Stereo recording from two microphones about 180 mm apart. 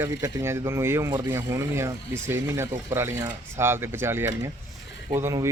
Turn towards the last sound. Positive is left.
turn(degrees=-15)  # may be behind; listen again after turning